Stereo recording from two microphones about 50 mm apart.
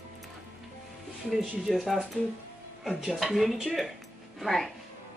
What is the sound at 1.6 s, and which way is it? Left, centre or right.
Speech, centre.